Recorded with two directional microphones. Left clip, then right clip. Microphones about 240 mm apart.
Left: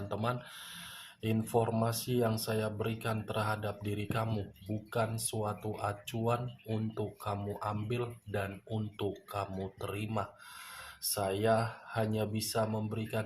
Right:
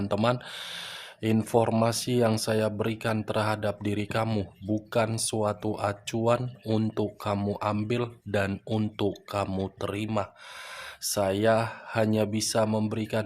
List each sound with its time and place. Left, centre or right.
0.1 s speech: right